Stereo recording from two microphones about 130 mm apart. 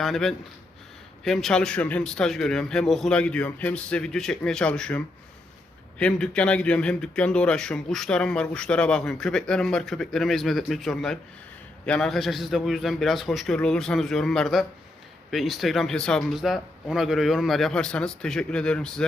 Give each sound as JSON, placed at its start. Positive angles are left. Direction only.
{"t": 0.0, "sound": "speech", "side_deg": 0}